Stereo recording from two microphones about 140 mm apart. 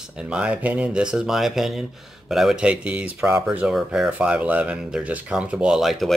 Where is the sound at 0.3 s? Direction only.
10° right (ahead or behind).